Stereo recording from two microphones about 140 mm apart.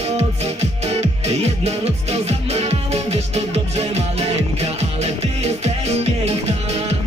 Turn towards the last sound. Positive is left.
turn(degrees=-45)  # may be behind; listen again after turning